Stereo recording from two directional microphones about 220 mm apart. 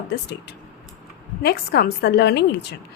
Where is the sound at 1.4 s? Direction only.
45° left (ahead or behind).